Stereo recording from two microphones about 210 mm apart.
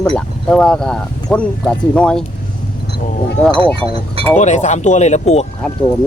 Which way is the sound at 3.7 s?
25° right (ahead or behind).